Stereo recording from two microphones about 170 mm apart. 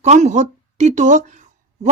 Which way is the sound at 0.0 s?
40° right (ahead or behind).